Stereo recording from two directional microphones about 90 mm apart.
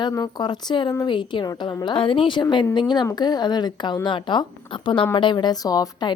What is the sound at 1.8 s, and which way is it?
A woman's voice, 75° left (ahead or behind).